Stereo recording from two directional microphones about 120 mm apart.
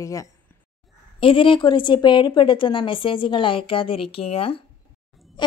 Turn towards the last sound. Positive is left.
turn(degrees=50)  # may be behind; listen again after turning